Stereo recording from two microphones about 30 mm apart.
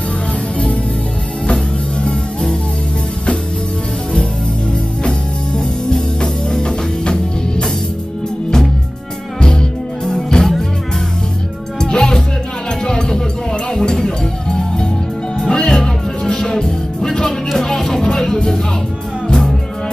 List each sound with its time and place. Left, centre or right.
5.6 s music: left
9.4 s music: left
11.8 s music: left